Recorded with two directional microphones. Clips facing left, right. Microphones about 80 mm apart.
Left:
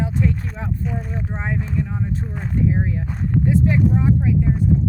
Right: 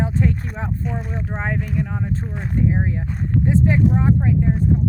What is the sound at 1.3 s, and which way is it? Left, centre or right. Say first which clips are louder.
Speech: right 1 dB; right.